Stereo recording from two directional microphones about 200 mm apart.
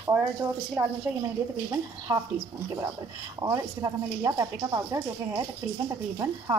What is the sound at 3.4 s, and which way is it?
Speech, 15° right (ahead or behind).